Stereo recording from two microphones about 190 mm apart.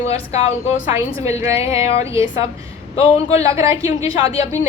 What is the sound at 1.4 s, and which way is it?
Speech, 15° right (ahead or behind).